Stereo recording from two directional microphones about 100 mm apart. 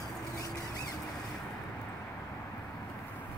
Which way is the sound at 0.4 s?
35° left (ahead or behind).